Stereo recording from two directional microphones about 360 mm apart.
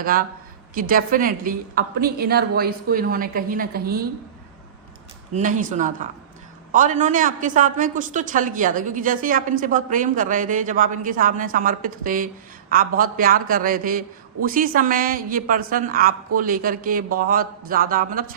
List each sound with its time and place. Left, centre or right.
0.0 s a woman's voice: right
5.3 s a woman's voice: right